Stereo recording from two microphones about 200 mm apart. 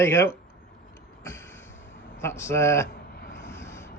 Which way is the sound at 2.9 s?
50° left (ahead or behind).